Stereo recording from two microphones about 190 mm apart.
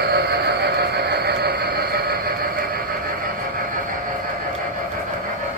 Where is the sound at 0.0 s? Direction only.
55° right (ahead or behind).